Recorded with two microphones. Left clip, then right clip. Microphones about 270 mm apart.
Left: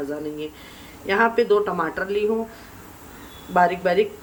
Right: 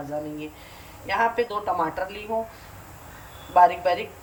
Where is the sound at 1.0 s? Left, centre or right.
Centre.